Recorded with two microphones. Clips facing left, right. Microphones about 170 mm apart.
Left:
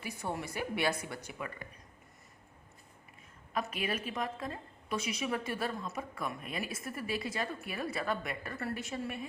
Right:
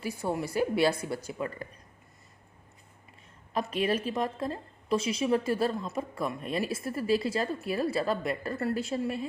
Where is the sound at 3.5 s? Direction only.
35° right (ahead or behind).